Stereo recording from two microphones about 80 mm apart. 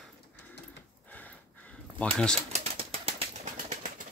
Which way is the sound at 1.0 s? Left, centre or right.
Centre.